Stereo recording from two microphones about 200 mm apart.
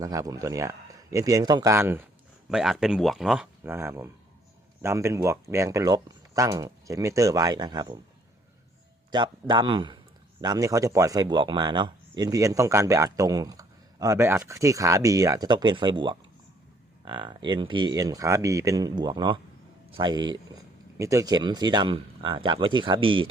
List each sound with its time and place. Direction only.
0.0 s speech: 20° right (ahead or behind)
2.5 s speech: centre (ahead or behind); by 7.9 s 20° right (ahead or behind)
9.1 s speech: 20° right (ahead or behind)